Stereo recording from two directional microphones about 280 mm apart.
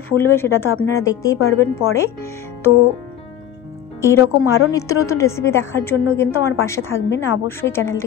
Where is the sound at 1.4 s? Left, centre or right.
Left.